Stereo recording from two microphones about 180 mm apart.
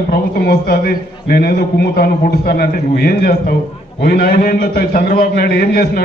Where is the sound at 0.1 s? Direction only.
55° left (ahead or behind).